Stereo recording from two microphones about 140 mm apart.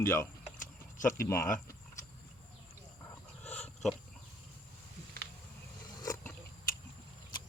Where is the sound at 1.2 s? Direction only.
20° left (ahead or behind).